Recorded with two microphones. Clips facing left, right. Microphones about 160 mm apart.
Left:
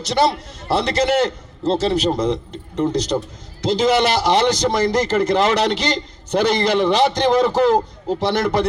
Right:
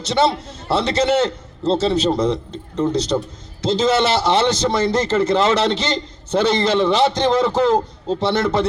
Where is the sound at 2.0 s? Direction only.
10° left (ahead or behind).